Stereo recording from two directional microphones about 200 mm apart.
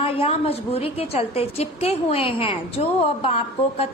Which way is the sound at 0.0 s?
30° left (ahead or behind).